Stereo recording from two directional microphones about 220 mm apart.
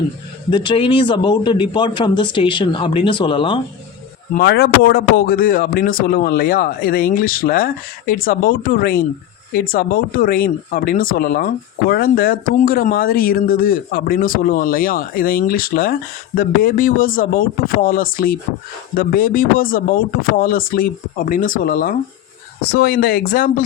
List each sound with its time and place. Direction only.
0.5 s speech: 20° left (ahead or behind)
4.4 s speech: 45° left (ahead or behind)